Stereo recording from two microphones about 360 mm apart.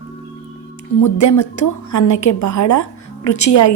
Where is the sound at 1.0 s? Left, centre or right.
Left.